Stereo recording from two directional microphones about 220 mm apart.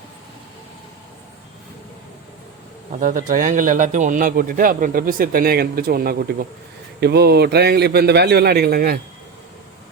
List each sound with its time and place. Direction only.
3.0 s a man's voice: 35° right (ahead or behind)